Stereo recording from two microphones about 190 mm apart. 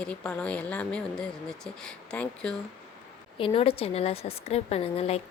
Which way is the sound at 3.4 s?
30° left (ahead or behind).